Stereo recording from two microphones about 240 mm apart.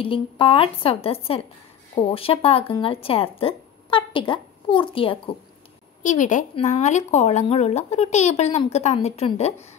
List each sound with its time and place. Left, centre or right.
0.0 s speech: left